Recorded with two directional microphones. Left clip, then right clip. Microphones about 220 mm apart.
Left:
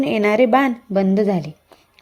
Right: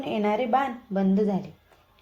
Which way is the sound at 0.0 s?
50° left (ahead or behind).